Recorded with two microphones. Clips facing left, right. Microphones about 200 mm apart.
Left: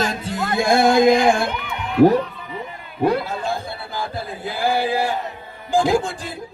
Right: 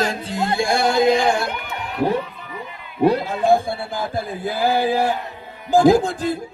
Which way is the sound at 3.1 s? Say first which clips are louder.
Right 6 dB; 50° right (ahead or behind).